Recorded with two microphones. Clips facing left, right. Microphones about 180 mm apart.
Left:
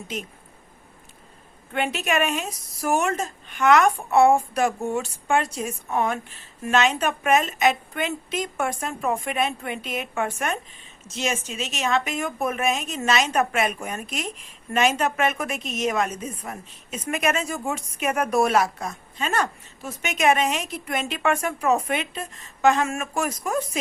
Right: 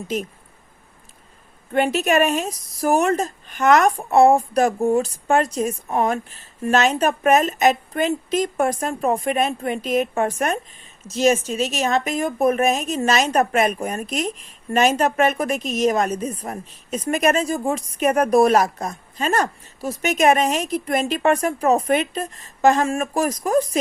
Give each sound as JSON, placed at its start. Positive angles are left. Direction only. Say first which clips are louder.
{"t": 1.7, "sound": "speech", "louder": "right 6 dB", "side_deg": -40}